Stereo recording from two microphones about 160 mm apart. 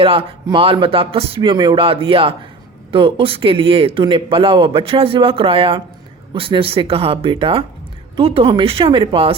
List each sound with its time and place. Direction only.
0.0 s speech: 35° right (ahead or behind)